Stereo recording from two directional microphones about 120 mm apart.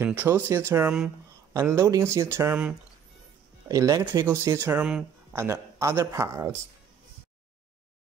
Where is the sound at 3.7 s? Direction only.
25° right (ahead or behind); by 5.1 s 10° right (ahead or behind).